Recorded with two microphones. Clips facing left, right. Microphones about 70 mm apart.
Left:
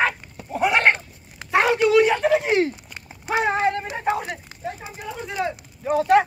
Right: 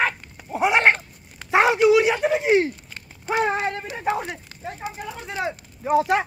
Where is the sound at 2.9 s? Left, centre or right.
Centre.